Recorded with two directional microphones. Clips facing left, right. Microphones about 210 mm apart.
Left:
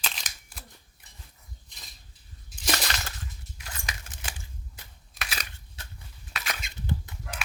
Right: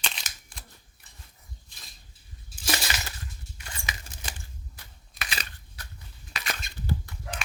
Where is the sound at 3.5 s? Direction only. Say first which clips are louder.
Right 1 dB; 5° left (ahead or behind).